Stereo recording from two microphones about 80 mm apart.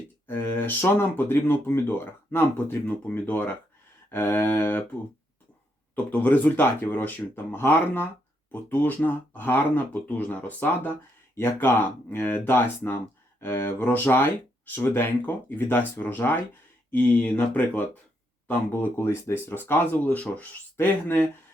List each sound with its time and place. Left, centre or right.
0.3 s speech: left
6.1 s speech: left